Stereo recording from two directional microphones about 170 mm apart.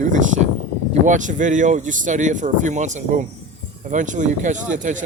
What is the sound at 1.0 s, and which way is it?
Speech, 50° right (ahead or behind).